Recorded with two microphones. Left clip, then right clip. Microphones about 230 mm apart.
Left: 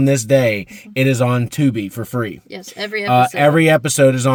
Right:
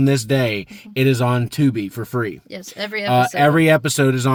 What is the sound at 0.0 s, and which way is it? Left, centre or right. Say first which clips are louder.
Speech: left 5 dB; centre.